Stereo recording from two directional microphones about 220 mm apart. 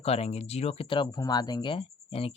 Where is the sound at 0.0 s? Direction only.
30° left (ahead or behind).